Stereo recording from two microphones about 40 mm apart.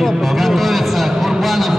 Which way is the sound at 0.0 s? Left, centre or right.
Centre.